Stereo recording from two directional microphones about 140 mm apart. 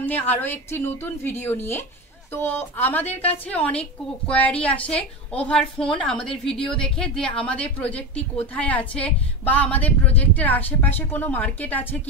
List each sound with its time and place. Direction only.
0.0 s a woman's voice: 15° left (ahead or behind)